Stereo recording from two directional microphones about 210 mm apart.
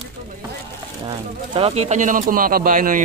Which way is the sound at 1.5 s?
25° right (ahead or behind).